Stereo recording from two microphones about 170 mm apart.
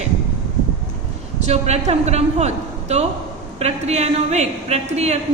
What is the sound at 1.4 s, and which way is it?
A woman's voice, 40° right (ahead or behind).